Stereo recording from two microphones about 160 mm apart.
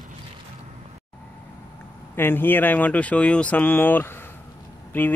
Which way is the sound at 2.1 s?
15° left (ahead or behind).